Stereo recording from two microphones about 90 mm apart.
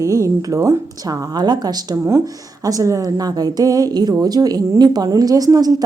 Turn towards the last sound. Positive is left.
turn(degrees=-45)  # may be behind; listen again after turning